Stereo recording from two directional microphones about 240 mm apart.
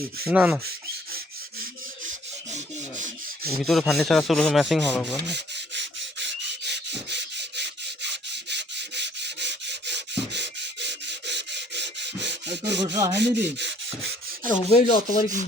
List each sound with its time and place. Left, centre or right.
0.3 s rub: centre
3.6 s rub: centre
5.3 s rub: right
12.8 s speech: centre
13.1 s speech: right
14.7 s rub: left